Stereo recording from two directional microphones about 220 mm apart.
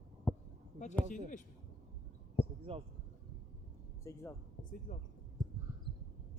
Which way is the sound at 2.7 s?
25° right (ahead or behind).